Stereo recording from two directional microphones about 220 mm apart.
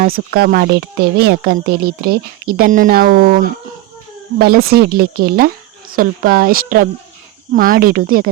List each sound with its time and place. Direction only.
0.0 s speech: 45° right (ahead or behind)